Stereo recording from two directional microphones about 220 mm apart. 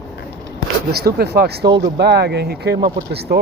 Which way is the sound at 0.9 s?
45° right (ahead or behind).